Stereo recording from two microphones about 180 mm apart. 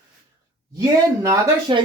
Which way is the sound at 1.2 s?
20° right (ahead or behind).